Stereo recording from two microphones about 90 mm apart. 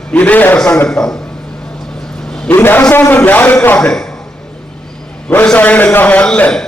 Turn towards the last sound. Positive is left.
turn(degrees=10)  # may be behind; listen again after turning